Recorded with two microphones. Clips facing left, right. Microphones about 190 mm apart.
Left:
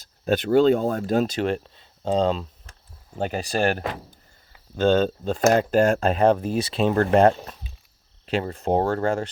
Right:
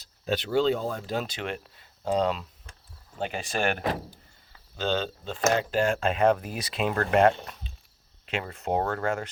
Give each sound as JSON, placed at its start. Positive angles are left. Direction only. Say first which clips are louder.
{"t": 0.0, "sound": "speech", "louder": "left 6 dB", "side_deg": 50}
{"t": 3.2, "sound": "speech", "louder": "left 5 dB", "side_deg": 40}
{"t": 4.8, "sound": "speech", "louder": "left 9 dB", "side_deg": 50}